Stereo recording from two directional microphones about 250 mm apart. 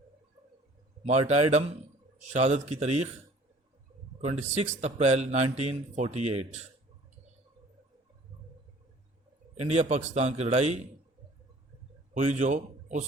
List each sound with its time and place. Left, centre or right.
1.0 s a man's voice: right
4.2 s a man's voice: right
9.6 s a man's voice: right
12.1 s a man's voice: right